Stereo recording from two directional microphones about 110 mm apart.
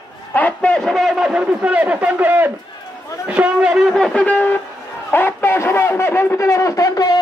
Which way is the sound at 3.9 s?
10° left (ahead or behind).